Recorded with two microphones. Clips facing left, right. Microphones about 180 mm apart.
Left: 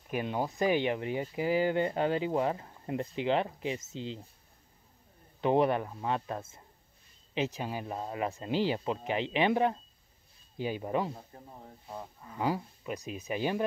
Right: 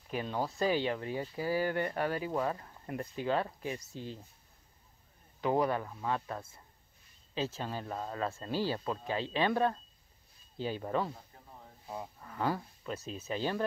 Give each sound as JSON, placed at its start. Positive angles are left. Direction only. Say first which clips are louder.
{"t": 0.1, "sound": "speech", "louder": "left 2 dB", "side_deg": 15}
{"t": 5.4, "sound": "speech", "louder": "left 4 dB", "side_deg": 25}
{"t": 11.1, "sound": "speech", "louder": "left 5 dB", "side_deg": 35}
{"t": 12.3, "sound": "speech", "louder": "left 2 dB", "side_deg": 10}